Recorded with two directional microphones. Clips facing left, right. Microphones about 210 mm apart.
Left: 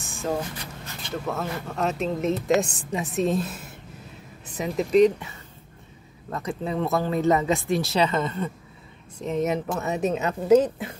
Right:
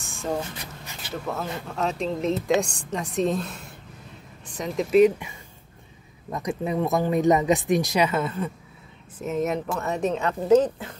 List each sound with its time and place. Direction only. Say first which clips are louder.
0.0 s a sound: left 1 dB; centre (ahead or behind)
1.1 s a woman's voice: left 1 dB; centre (ahead or behind)
6.3 s a woman's voice: right 2 dB; 15° right (ahead or behind); by 11.0 s 10° left (ahead or behind)